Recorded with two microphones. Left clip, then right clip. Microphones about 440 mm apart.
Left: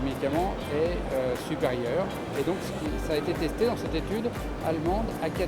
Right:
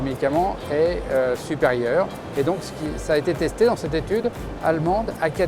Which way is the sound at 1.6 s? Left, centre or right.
Right.